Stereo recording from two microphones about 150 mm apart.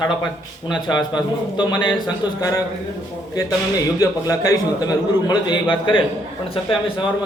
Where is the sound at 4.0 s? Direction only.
25° left (ahead or behind); by 6.8 s 40° left (ahead or behind).